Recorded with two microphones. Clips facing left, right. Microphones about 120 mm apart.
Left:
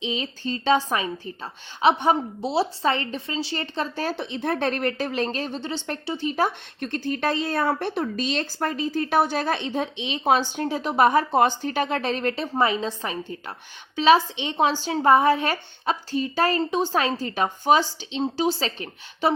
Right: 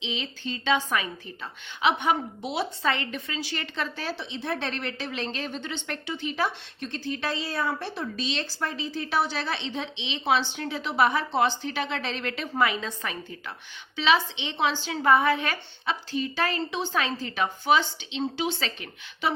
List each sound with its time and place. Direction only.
0.0 s a woman's voice: 40° left (ahead or behind)